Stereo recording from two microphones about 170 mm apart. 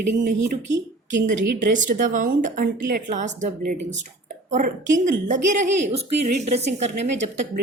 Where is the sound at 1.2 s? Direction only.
45° right (ahead or behind).